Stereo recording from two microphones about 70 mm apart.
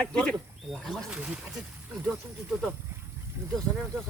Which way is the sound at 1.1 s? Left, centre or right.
Centre.